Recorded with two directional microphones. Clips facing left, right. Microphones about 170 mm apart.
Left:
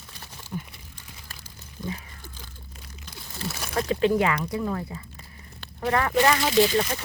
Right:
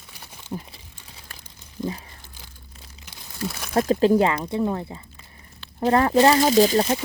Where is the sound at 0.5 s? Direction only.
35° right (ahead or behind).